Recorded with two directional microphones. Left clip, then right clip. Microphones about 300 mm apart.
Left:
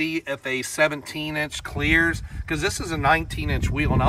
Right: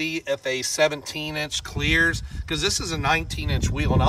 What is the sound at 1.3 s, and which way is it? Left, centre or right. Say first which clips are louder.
Speech: left 2 dB; centre.